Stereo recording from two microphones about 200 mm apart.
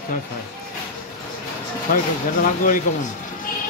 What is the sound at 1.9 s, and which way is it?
Speech, 45° left (ahead or behind).